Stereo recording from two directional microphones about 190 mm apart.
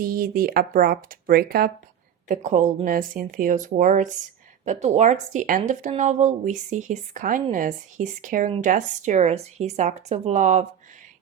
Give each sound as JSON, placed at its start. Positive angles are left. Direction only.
{"t": 0.0, "sound": "speech", "side_deg": -50}
{"t": 2.2, "sound": "speech", "side_deg": -40}